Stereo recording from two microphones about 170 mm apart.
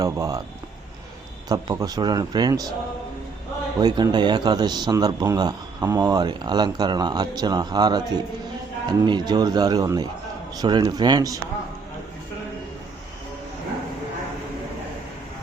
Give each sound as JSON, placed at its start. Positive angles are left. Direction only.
{"t": 0.0, "sound": "a man's voice", "side_deg": -20}
{"t": 1.5, "sound": "a man's voice", "side_deg": -25}
{"t": 3.8, "sound": "a man's voice", "side_deg": -25}